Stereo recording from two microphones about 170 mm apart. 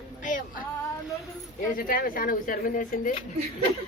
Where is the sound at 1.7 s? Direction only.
55° left (ahead or behind).